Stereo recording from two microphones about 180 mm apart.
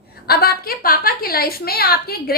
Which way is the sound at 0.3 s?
60° left (ahead or behind).